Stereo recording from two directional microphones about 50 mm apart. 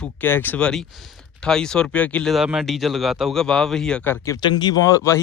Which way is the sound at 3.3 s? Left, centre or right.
Centre.